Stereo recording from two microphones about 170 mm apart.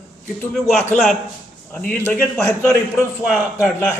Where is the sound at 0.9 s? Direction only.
Centre (ahead or behind).